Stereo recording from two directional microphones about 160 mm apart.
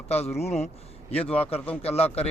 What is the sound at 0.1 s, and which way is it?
Speech, 40° left (ahead or behind).